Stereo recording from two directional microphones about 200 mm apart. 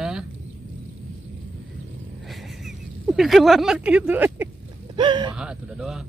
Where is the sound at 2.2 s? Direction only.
Centre (ahead or behind).